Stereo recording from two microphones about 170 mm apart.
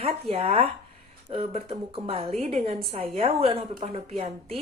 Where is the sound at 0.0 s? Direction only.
35° right (ahead or behind).